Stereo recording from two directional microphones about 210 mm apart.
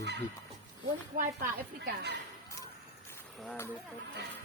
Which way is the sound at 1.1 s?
40° right (ahead or behind).